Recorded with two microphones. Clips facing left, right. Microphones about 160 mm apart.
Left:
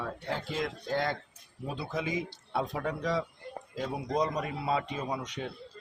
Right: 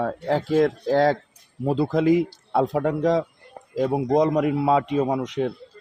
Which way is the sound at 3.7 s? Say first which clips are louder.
Right 11 dB; 80° right.